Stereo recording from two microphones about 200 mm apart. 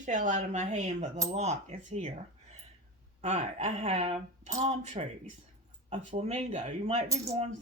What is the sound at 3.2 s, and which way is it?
Speech, 35° right (ahead or behind).